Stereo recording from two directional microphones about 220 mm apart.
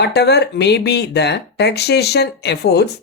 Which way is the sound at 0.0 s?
50° left (ahead or behind).